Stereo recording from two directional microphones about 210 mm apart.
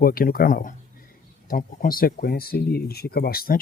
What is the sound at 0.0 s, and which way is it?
Speech, 45° left (ahead or behind).